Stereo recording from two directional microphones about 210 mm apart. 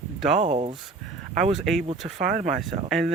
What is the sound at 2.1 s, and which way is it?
Speech, 35° right (ahead or behind).